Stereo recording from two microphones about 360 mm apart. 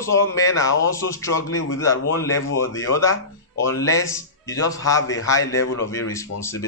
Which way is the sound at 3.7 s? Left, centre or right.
Centre.